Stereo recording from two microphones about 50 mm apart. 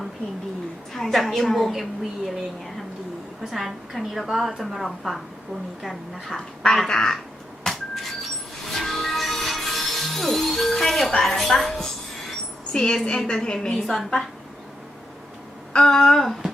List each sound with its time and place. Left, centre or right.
0.9 s a woman's voice: centre
6.8 s a woman's voice: centre
7.6 s music: centre
11.2 s a sound: centre
13.1 s a woman's voice: centre
13.8 s a woman's voice: centre
15.7 s a woman's voice: centre